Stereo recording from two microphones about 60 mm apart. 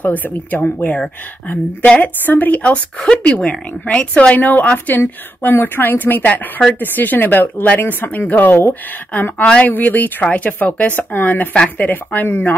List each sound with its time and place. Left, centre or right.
0.0 s a woman's voice: left